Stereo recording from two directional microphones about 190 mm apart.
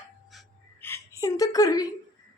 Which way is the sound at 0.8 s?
15° left (ahead or behind).